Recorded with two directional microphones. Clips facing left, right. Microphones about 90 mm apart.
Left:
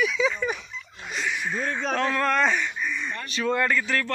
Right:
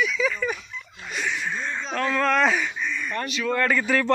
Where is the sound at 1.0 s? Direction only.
Centre (ahead or behind).